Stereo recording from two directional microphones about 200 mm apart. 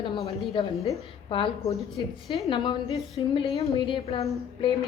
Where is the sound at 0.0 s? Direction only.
30° left (ahead or behind).